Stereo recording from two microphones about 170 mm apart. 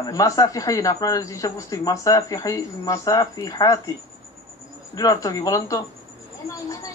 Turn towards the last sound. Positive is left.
turn(degrees=20)  # may be behind; listen again after turning